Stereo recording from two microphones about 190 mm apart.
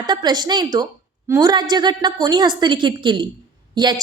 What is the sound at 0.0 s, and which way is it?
A woman's voice, 20° right (ahead or behind).